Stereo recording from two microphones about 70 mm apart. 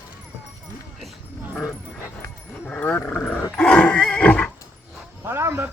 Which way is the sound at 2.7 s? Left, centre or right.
Centre.